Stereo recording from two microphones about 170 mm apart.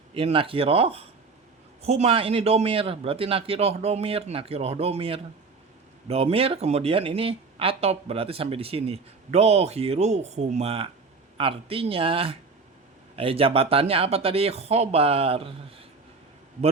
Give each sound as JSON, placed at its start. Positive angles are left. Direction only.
{"t": 0.1, "sound": "speech", "side_deg": -30}